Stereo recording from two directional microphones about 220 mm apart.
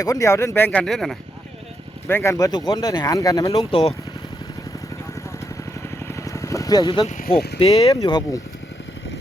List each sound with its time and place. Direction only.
0.0 s speech: 15° left (ahead or behind)
6.1 s vehicle: 15° left (ahead or behind)
7.1 s speech: 40° left (ahead or behind)
7.7 s speech: 15° left (ahead or behind)